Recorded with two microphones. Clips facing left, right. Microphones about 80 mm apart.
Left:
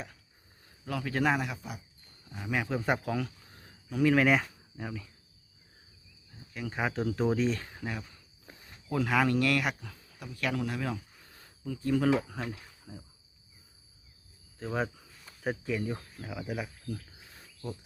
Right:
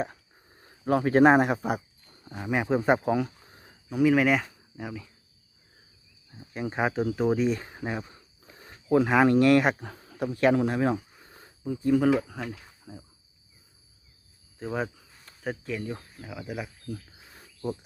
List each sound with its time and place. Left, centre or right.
0.6 s speech: right
2.4 s speech: right; by 5.1 s centre
6.3 s speech: right
8.9 s speech: right
9.7 s speech: right
11.1 s a sound: right
12.3 s speech: centre
14.6 s speech: centre